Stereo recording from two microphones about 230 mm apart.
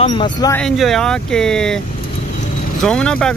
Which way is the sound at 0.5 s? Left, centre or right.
Centre.